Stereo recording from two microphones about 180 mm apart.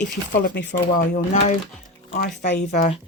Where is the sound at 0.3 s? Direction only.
70° left (ahead or behind).